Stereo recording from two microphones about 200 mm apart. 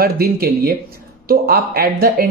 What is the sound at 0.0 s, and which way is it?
Speech, 50° right (ahead or behind).